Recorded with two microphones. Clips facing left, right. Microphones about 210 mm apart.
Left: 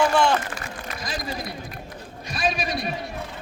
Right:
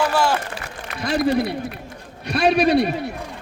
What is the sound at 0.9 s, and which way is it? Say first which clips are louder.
A man's voice: right 14 dB; 65° right (ahead or behind).